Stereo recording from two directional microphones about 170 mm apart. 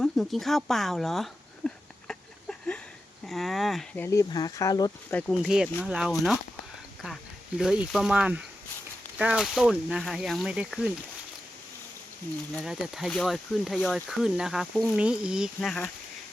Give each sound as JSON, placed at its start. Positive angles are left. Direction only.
{"t": 0.0, "sound": "a sound", "side_deg": 0}
{"t": 3.2, "sound": "speech", "side_deg": 0}
{"t": 4.0, "sound": "speech", "side_deg": 20}
{"t": 5.3, "sound": "speech", "side_deg": -5}
{"t": 7.6, "sound": "speech", "side_deg": -5}
{"t": 12.5, "sound": "speech", "side_deg": 0}